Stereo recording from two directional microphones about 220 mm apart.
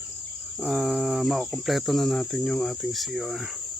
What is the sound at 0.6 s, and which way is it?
Cricket, centre (ahead or behind).